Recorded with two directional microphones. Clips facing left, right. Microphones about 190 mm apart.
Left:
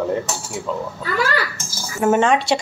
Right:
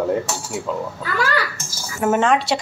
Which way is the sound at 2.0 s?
Centre (ahead or behind).